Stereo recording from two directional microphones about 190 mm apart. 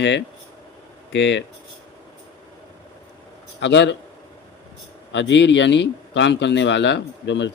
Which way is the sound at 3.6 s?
70° left (ahead or behind).